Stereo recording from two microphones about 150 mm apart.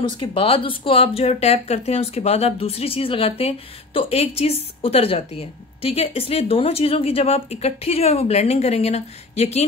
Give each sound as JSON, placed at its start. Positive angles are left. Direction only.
{"t": 0.2, "sound": "a woman's voice", "side_deg": 35}